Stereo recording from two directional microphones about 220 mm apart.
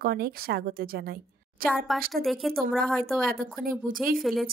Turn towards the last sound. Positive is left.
turn(degrees=0)  # may be behind; listen again after turning